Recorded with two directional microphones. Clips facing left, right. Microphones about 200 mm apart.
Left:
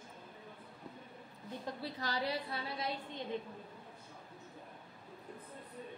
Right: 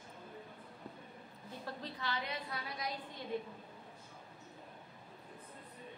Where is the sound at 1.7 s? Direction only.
15° left (ahead or behind).